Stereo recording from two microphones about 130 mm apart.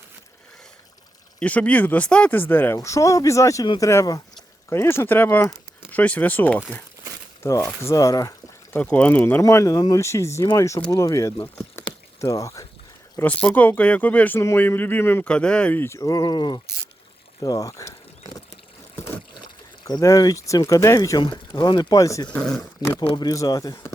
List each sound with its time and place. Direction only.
1.4 s speech: 10° left (ahead or behind); by 8.3 s 25° left (ahead or behind)
8.7 s speech: 10° left (ahead or behind)
11.5 s rowboat: 20° left (ahead or behind)
13.1 s speech: 15° left (ahead or behind)
19.8 s speech: 25° left (ahead or behind)
22.3 s speech: 5° left (ahead or behind)
23.0 s speech: 35° left (ahead or behind)